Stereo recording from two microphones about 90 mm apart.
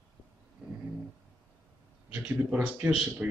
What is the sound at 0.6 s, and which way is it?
Vehicle, 10° right (ahead or behind).